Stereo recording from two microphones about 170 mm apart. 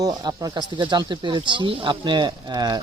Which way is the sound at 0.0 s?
25° right (ahead or behind).